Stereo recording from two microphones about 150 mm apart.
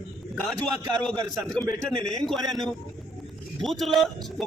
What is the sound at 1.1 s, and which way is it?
Speech, 25° right (ahead or behind).